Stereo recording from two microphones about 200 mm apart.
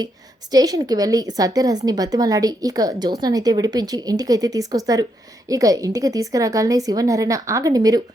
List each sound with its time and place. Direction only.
0.5 s a woman's voice: 15° right (ahead or behind)